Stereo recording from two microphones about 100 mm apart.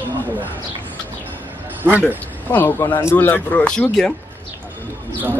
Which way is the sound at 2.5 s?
20° left (ahead or behind).